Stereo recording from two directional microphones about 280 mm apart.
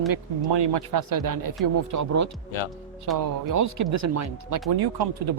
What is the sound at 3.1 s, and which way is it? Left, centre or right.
Speech, right.